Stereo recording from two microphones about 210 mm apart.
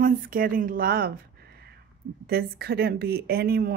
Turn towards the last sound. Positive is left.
turn(degrees=-45)  # may be behind; listen again after turning